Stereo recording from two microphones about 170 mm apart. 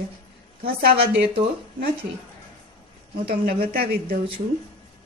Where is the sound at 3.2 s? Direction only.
65° right (ahead or behind).